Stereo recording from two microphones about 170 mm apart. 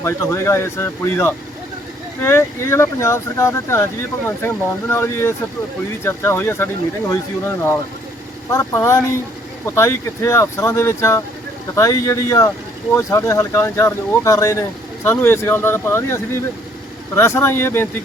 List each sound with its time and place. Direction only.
0.0 s speech: 15° left (ahead or behind)